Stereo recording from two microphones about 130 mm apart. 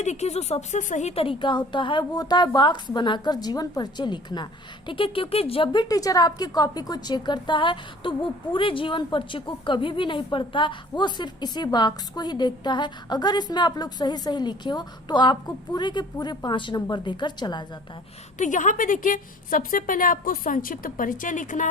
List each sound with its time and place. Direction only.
0.0 s a woman's voice: 60° left (ahead or behind); by 17.7 s 35° left (ahead or behind)
18.3 s a woman's voice: 75° left (ahead or behind)